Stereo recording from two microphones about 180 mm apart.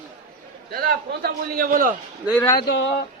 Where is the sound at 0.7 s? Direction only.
60° right (ahead or behind).